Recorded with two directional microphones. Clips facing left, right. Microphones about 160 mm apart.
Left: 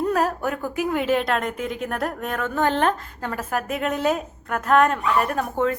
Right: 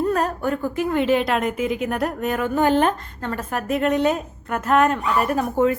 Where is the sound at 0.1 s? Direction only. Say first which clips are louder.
Right 1 dB; 5° left (ahead or behind).